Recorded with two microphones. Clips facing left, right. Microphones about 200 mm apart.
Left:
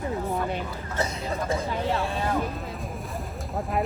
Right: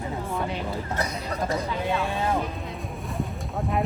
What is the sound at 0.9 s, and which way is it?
Speech, 25° left (ahead or behind).